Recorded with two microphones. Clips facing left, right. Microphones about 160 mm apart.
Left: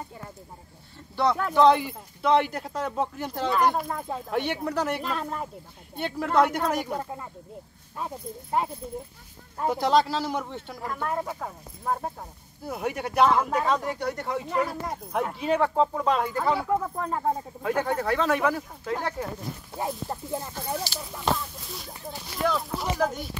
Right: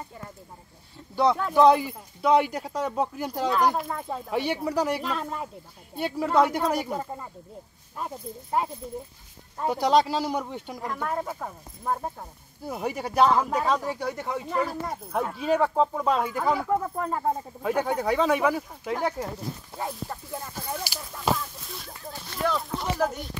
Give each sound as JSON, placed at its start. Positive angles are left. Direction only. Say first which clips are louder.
{"t": 1.3, "sound": "speech", "louder": "even", "side_deg": -5}
{"t": 9.7, "sound": "speech", "louder": "right 1 dB", "side_deg": -10}
{"t": 11.1, "sound": "speech", "louder": "left 2 dB", "side_deg": 0}
{"t": 20.1, "sound": "a sound", "louder": "left 4 dB", "side_deg": 20}
{"t": 21.0, "sound": "a sound", "louder": "left 2 dB", "side_deg": 5}
{"t": 21.3, "sound": "speech", "louder": "right 1 dB", "side_deg": 0}